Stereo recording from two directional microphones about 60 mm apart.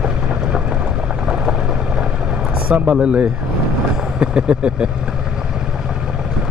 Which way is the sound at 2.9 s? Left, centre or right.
Centre.